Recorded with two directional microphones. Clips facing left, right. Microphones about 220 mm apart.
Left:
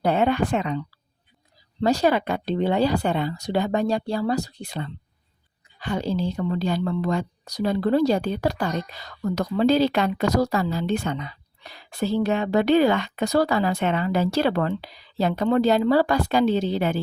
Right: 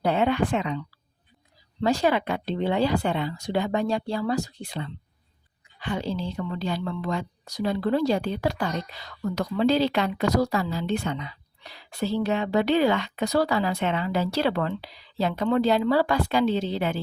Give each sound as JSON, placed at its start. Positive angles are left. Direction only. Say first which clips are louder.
{"t": 0.0, "sound": "a woman's voice", "louder": "left 2 dB", "side_deg": 45}
{"t": 1.8, "sound": "a woman's voice", "louder": "left 2 dB", "side_deg": 40}